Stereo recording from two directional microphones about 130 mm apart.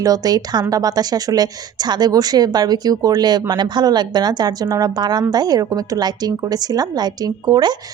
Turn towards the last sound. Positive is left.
turn(degrees=-30)  # may be behind; listen again after turning